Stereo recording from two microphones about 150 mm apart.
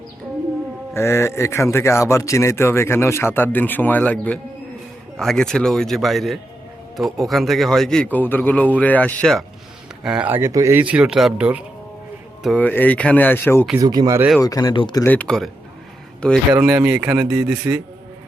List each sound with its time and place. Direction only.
0.9 s a man's voice: 20° left (ahead or behind)
10.0 s speech: 5° right (ahead or behind)
12.5 s speech: 10° left (ahead or behind)
13.7 s speech: 25° right (ahead or behind)
14.4 s speech: 25° left (ahead or behind)
15.0 s speech: 10° left (ahead or behind)
16.5 s speech: 10° right (ahead or behind)